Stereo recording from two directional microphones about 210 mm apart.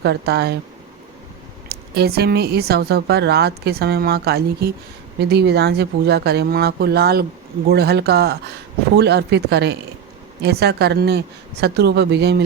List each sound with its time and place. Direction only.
0.0 s a woman's voice: 50° right (ahead or behind)
1.7 s a woman's voice: 50° right (ahead or behind)